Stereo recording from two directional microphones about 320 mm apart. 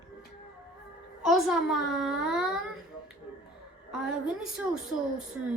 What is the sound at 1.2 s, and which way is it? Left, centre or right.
A woman's voice, centre.